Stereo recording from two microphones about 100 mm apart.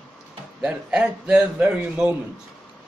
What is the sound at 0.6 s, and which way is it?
A man's voice, 10° right (ahead or behind).